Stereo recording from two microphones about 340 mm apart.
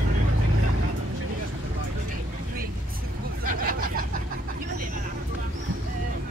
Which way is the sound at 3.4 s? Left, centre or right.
Right.